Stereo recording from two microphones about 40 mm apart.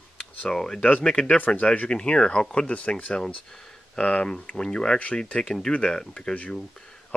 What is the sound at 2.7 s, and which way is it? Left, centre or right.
Speech, left.